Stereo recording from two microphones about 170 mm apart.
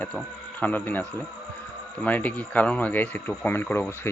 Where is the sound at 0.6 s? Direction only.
10° left (ahead or behind).